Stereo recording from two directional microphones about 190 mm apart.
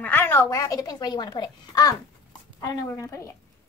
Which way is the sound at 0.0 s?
10° left (ahead or behind).